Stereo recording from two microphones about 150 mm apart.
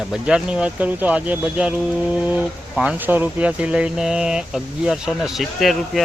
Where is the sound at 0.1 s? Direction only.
5° right (ahead or behind).